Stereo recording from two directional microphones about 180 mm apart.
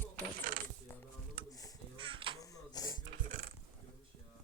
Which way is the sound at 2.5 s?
20° left (ahead or behind).